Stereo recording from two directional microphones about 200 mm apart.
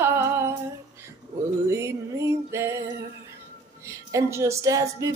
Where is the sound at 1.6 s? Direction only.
15° right (ahead or behind).